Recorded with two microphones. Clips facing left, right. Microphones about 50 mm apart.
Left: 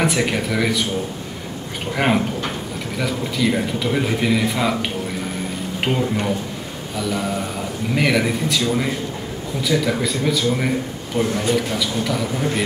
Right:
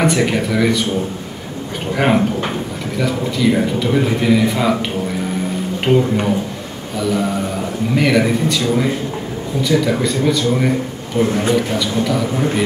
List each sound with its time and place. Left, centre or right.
0.0 s a man's voice: centre
2.0 s a man's voice: centre
5.9 s a man's voice: centre
11.2 s a man's voice: right
11.8 s a man's voice: centre